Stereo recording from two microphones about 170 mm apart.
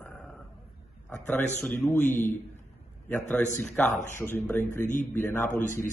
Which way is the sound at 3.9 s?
45° left (ahead or behind).